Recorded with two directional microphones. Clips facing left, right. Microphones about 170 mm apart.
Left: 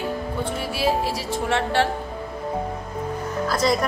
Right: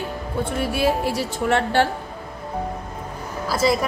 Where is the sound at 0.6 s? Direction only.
55° right (ahead or behind).